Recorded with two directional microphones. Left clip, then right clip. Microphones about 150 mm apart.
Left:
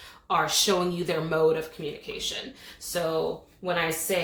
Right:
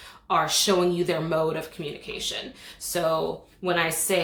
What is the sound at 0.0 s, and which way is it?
Speech, 25° right (ahead or behind).